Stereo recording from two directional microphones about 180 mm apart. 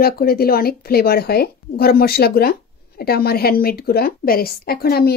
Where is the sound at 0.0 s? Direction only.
55° left (ahead or behind).